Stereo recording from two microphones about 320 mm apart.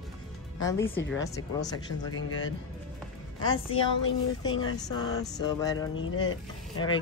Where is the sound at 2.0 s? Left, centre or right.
Left.